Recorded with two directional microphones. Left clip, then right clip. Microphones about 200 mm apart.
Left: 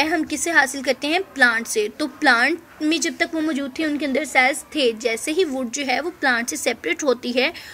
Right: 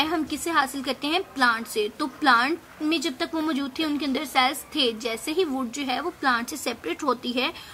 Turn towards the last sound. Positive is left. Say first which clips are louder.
# left 5 dB
turn(degrees=25)  # may be behind; listen again after turning